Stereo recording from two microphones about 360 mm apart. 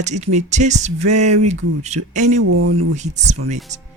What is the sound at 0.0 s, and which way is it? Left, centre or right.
Speech, centre.